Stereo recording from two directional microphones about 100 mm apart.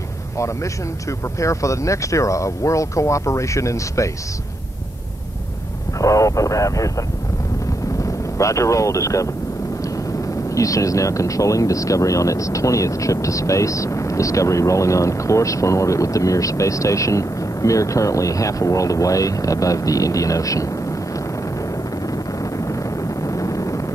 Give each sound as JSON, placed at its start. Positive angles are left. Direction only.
{"t": 1.4, "sound": "speech", "side_deg": 30}
{"t": 5.9, "sound": "speech", "side_deg": 35}
{"t": 10.5, "sound": "speech", "side_deg": 35}
{"t": 22.0, "sound": "vehicle", "side_deg": 35}